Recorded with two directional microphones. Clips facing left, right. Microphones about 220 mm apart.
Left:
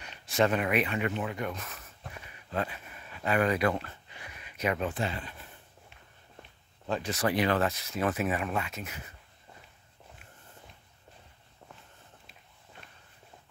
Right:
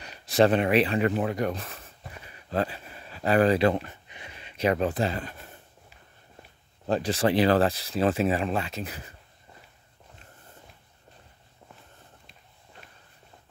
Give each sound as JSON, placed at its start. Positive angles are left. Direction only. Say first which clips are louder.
{"t": 0.0, "sound": "speech", "louder": "right 6 dB", "side_deg": -35}
{"t": 3.8, "sound": "a sound", "louder": "right 2 dB", "side_deg": -20}
{"t": 6.9, "sound": "speech", "louder": "right 6 dB", "side_deg": -35}